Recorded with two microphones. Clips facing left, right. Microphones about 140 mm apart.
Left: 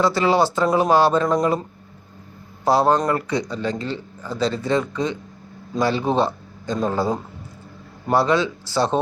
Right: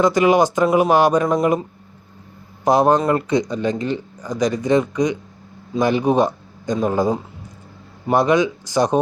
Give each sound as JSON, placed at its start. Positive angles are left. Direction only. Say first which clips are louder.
{"t": 0.0, "sound": "speech", "louder": "right 3 dB", "side_deg": -15}
{"t": 2.6, "sound": "speech", "louder": "right 2 dB", "side_deg": -20}